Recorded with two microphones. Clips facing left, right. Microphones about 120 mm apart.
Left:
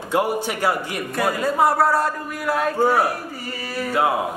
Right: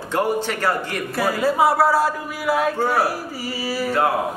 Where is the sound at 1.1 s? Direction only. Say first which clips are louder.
Right 1 dB; centre (ahead or behind).